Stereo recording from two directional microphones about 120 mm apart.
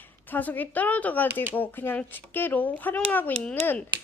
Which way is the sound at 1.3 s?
15° right (ahead or behind).